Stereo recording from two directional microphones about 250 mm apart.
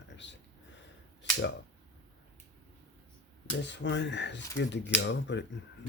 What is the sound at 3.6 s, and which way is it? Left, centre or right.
Speech, left.